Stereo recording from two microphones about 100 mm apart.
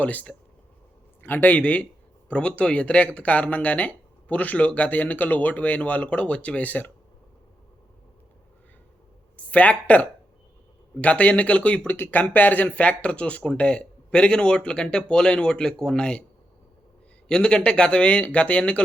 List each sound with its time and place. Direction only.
0.0 s speech: 15° left (ahead or behind)
9.5 s speech: 15° left (ahead or behind)
17.2 s speech: 10° left (ahead or behind)